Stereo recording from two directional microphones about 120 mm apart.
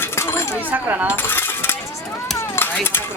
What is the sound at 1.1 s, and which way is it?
Coin, 20° left (ahead or behind).